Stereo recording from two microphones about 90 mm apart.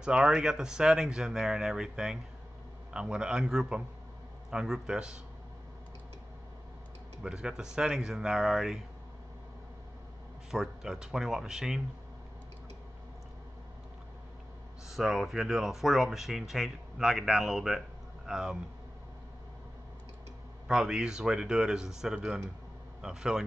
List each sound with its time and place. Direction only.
0.0 s speech: 10° right (ahead or behind)
7.2 s speech: 10° right (ahead or behind)
10.5 s speech: 5° right (ahead or behind)
14.9 s speech: 5° right (ahead or behind)
20.6 s speech: 5° right (ahead or behind)